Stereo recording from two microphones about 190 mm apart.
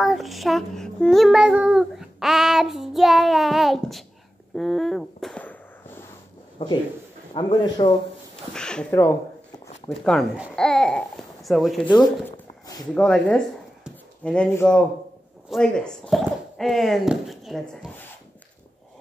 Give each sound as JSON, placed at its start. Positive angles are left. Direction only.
{"t": 0.0, "sound": "child singing", "side_deg": 0}
{"t": 4.6, "sound": "firecracker", "side_deg": 0}
{"t": 6.6, "sound": "speech", "side_deg": 25}
{"t": 8.5, "sound": "child singing", "side_deg": 5}
{"t": 10.5, "sound": "speech", "side_deg": 5}
{"t": 11.9, "sound": "child singing", "side_deg": 0}
{"t": 12.3, "sound": "a sound", "side_deg": 20}
{"t": 12.9, "sound": "child singing", "side_deg": 5}